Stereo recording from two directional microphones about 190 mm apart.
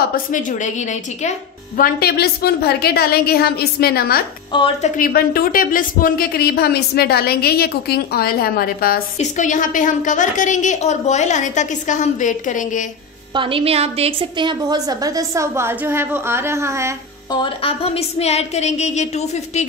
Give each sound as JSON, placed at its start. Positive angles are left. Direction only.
{"t": 0.1, "sound": "speech", "side_deg": 45}
{"t": 1.8, "sound": "a woman's voice", "side_deg": 55}
{"t": 4.5, "sound": "a woman's voice", "side_deg": 25}
{"t": 4.9, "sound": "a woman's voice", "side_deg": 50}
{"t": 13.3, "sound": "a woman's voice", "side_deg": -25}
{"t": 17.3, "sound": "a woman's voice", "side_deg": 30}